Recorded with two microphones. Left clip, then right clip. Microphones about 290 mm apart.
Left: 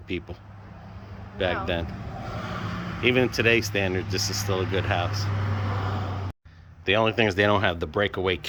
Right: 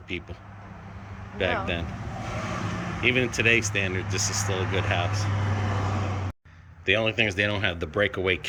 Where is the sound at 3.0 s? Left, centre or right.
Centre.